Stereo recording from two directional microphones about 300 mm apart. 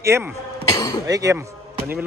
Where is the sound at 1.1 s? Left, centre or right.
Centre.